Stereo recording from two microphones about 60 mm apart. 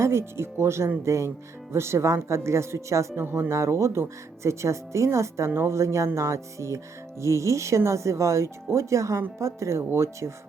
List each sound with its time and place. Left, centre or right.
0.0 s speech: right
3.2 s speech: right
3.5 s speech: right